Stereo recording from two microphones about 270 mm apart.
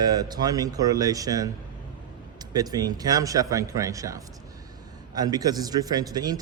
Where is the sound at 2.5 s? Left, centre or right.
Centre.